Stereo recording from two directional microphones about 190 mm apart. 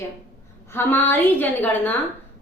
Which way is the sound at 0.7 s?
10° left (ahead or behind).